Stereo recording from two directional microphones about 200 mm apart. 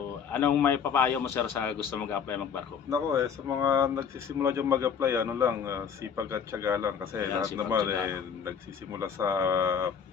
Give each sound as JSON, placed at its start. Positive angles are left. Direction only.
{"t": 0.3, "sound": "a man's voice", "side_deg": 10}
{"t": 2.9, "sound": "speech", "side_deg": -15}